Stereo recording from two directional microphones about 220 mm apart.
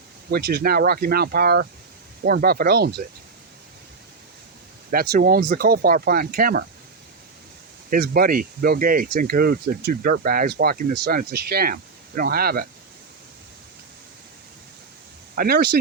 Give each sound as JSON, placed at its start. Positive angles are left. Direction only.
{"t": 0.3, "sound": "speech", "side_deg": -45}
{"t": 4.9, "sound": "speech", "side_deg": -40}
{"t": 7.9, "sound": "speech", "side_deg": -40}
{"t": 15.4, "sound": "speech", "side_deg": -45}